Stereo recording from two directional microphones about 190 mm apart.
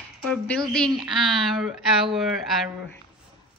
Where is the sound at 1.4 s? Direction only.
Centre (ahead or behind).